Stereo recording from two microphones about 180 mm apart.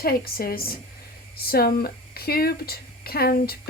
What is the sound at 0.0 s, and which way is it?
Speech, 55° left (ahead or behind).